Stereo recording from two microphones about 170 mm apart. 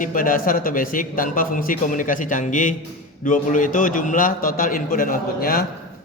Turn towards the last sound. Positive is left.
turn(degrees=60)  # may be behind; listen again after turning